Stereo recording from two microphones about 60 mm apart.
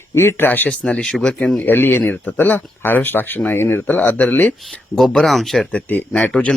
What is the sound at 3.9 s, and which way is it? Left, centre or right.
Speech, left.